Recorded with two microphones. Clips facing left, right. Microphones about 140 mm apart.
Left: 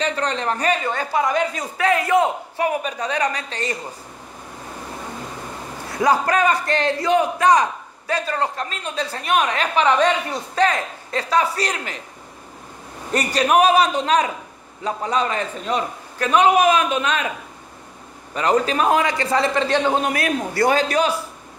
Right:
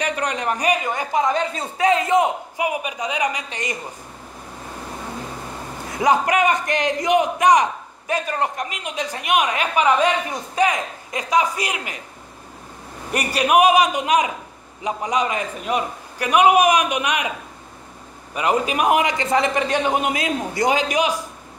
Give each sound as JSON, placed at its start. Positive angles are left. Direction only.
{"t": 0.0, "sound": "a man's voice", "side_deg": -15}
{"t": 1.3, "sound": "a man's voice", "side_deg": -30}
{"t": 5.9, "sound": "a man's voice", "side_deg": -20}
{"t": 13.1, "sound": "a man's voice", "side_deg": -10}
{"t": 18.3, "sound": "a man's voice", "side_deg": -10}